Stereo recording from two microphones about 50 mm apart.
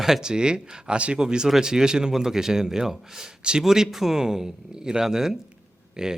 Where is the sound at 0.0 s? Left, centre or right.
Centre.